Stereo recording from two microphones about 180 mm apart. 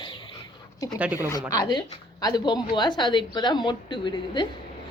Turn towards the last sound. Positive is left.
turn(degrees=25)  # may be behind; listen again after turning